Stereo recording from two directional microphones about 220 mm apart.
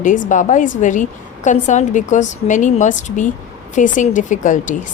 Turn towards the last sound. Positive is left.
turn(degrees=35)  # may be behind; listen again after turning